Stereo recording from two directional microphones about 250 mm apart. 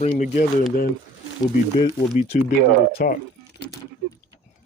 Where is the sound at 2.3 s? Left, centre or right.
Left.